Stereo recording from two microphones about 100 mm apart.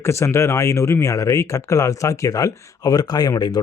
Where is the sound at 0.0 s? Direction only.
30° left (ahead or behind).